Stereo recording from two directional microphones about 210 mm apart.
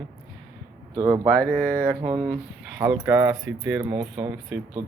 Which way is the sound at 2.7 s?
15° right (ahead or behind).